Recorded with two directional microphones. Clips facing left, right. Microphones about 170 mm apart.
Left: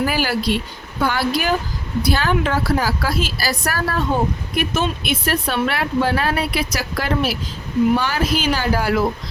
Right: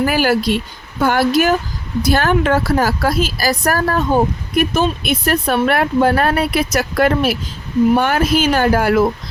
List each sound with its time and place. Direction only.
0.0 s speech: 50° right (ahead or behind)